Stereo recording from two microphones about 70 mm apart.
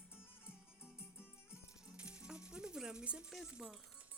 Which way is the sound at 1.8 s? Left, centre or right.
Centre.